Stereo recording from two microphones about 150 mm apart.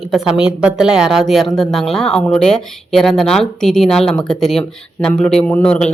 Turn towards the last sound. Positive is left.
turn(degrees=5)  # may be behind; listen again after turning